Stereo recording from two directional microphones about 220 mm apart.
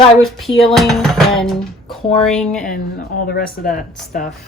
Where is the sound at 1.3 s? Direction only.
Centre (ahead or behind).